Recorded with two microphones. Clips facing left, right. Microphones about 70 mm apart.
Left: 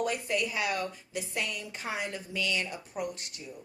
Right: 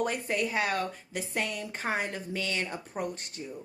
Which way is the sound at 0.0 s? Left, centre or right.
Right.